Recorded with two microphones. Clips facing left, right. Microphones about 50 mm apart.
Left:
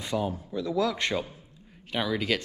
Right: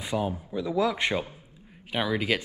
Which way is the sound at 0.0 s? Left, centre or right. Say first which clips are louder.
Right 1 dB; centre.